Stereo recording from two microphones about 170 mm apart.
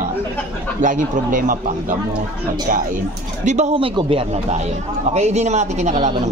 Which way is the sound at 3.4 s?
45° right (ahead or behind).